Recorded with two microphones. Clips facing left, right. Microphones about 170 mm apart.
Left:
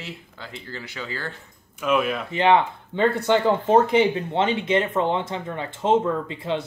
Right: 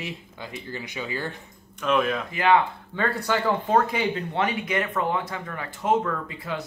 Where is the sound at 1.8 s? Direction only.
5° left (ahead or behind).